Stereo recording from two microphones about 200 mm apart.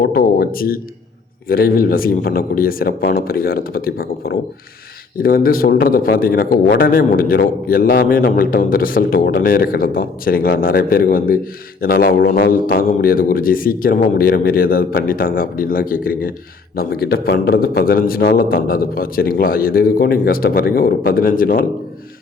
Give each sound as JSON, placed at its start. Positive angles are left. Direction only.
{"t": 0.0, "sound": "a man's voice", "side_deg": 50}